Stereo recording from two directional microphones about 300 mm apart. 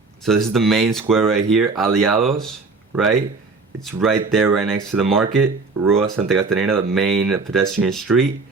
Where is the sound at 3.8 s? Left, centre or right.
Centre.